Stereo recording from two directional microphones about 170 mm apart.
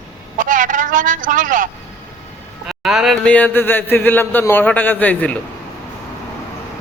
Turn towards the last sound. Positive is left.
turn(degrees=10)  # may be behind; listen again after turning